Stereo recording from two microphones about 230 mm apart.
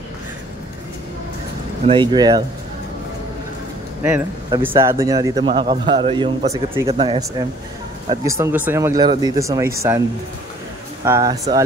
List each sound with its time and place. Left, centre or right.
1.9 s a man's voice: centre
4.0 s a man's voice: centre
11.1 s a man's voice: centre